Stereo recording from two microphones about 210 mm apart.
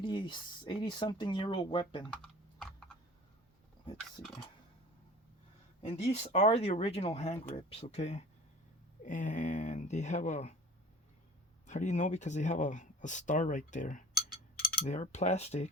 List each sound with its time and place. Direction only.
0.0 s speech: 20° left (ahead or behind)
6.0 s speech: 30° left (ahead or behind)
11.6 s speech: 35° left (ahead or behind)
14.6 s mechanisms: 45° left (ahead or behind)
14.9 s speech: 35° left (ahead or behind)